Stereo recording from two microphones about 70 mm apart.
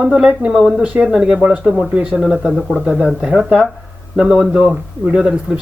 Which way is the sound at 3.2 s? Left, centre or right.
Centre.